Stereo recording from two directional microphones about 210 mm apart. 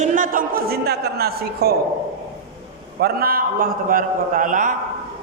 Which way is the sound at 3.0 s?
45° right (ahead or behind).